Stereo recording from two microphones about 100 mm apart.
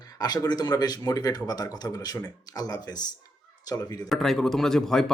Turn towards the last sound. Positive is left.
turn(degrees=5)  # may be behind; listen again after turning